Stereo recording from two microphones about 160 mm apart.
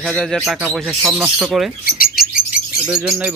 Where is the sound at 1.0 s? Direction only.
10° right (ahead or behind).